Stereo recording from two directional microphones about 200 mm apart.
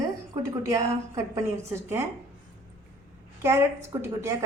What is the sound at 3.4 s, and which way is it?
Speech, 10° right (ahead or behind).